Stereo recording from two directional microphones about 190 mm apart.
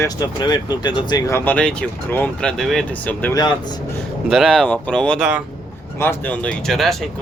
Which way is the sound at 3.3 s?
20° left (ahead or behind).